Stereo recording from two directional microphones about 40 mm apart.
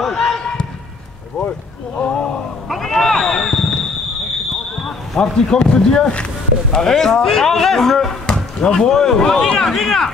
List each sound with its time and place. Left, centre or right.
0.0 s basketball bounce: centre
0.4 s basketball bounce: centre
2.0 s a sound: left
2.7 s a sound: centre
4.7 s speech: centre
8.3 s speech: centre